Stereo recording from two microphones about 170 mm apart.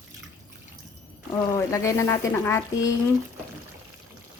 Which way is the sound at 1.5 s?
20° left (ahead or behind).